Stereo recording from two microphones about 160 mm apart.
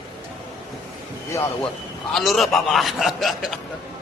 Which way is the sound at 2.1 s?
Centre (ahead or behind).